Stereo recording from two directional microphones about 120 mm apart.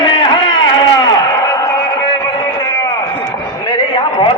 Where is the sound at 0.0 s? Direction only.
40° left (ahead or behind).